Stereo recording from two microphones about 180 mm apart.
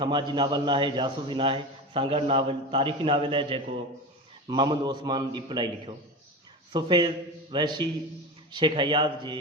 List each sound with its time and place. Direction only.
0.0 s a man's voice: 25° right (ahead or behind)